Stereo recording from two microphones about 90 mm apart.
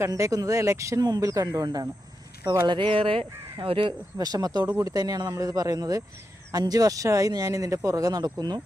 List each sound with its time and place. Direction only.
0.1 s speech: 40° right (ahead or behind)
2.6 s speech: 80° right
4.2 s speech: 45° right (ahead or behind)